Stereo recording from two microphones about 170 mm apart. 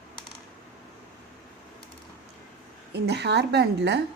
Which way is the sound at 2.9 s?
80° right.